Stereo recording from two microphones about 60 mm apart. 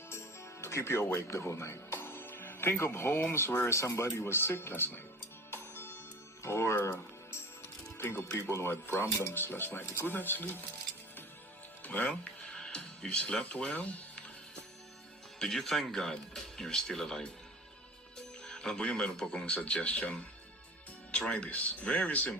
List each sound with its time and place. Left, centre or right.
0.1 s speech: left
5.5 s music: left
6.4 s speech: left
7.6 s music: left
8.4 s speech: left
9.8 s speech: left
10.2 s speech: left
11.9 s speech: left
12.5 s music: centre
13.4 s speech: centre
15.4 s speech: centre
18.4 s speech: centre